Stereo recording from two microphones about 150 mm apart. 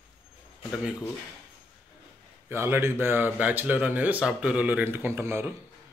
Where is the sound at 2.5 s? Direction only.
15° right (ahead or behind).